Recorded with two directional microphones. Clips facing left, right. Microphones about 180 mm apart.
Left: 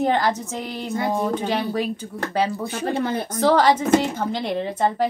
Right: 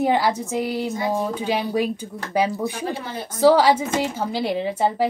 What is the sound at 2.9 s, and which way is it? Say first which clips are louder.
Speech: left 8 dB; 50° left (ahead or behind).